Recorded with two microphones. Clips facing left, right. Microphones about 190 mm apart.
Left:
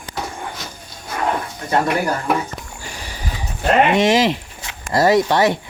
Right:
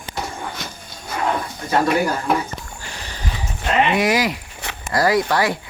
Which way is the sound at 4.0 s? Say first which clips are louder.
Left 4 dB; 25° left (ahead or behind).